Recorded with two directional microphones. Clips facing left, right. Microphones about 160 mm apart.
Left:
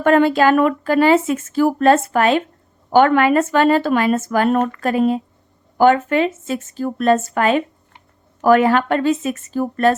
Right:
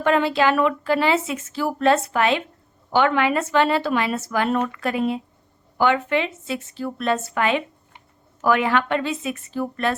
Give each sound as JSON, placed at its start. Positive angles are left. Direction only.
{"t": 0.0, "sound": "speech", "side_deg": 50}